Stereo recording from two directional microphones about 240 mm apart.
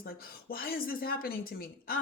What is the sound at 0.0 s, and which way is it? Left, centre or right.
Speech, left.